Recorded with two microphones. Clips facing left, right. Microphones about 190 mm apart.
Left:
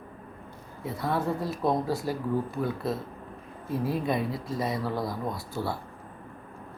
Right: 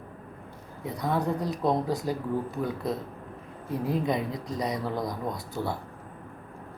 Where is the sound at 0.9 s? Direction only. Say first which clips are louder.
Right 1 dB; 15° right (ahead or behind).